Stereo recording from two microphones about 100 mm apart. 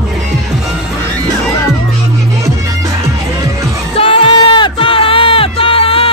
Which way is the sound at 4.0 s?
65° left (ahead or behind).